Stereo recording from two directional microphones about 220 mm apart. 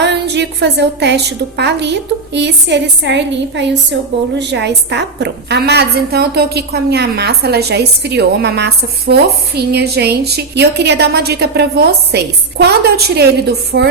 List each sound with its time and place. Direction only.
0.0 s a woman's voice: 50° right (ahead or behind)